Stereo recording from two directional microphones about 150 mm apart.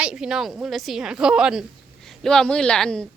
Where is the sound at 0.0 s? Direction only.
5° right (ahead or behind).